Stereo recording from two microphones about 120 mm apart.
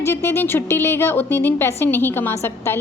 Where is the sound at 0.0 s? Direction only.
20° left (ahead or behind).